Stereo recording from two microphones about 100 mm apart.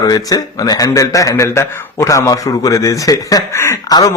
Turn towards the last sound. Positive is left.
turn(degrees=40)  # may be behind; listen again after turning